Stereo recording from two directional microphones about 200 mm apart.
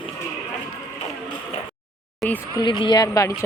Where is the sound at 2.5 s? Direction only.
25° left (ahead or behind).